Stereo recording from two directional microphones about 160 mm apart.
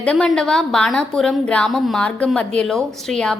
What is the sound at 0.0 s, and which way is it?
A woman's voice, 5° left (ahead or behind).